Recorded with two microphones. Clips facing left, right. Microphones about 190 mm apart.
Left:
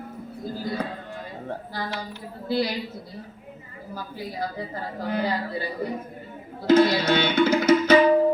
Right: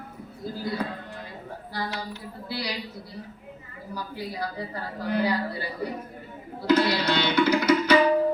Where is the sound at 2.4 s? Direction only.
50° left (ahead or behind).